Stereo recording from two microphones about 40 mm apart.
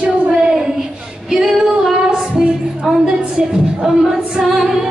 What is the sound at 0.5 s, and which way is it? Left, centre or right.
Child singing, centre.